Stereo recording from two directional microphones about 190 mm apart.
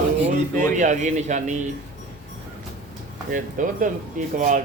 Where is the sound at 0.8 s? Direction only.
40° right (ahead or behind).